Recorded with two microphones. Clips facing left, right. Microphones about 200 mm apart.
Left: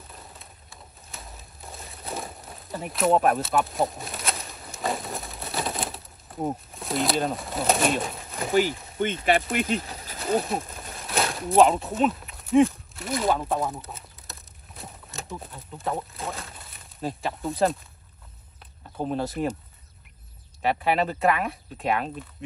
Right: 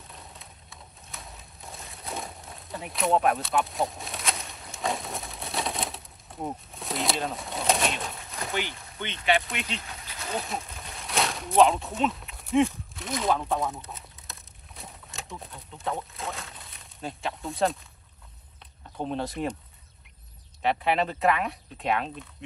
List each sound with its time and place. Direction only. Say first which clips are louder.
0.1 s bird: even; centre (ahead or behind)
1.0 s a sound: left 1 dB; centre (ahead or behind)
6.7 s speech: left 3 dB; centre (ahead or behind)
8.9 s speech: left 3 dB; 45° left (ahead or behind)
9.9 s a sound: left 6 dB; 35° left (ahead or behind)
10.9 s a sound: left 1 dB; centre (ahead or behind)
15.4 s speech: left 1 dB; centre (ahead or behind)
18.9 s speech: left 3 dB; 5° left (ahead or behind)
20.6 s speech: left 2 dB; 5° left (ahead or behind)